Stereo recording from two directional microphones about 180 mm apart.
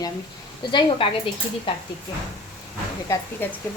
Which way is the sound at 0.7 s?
25° left (ahead or behind).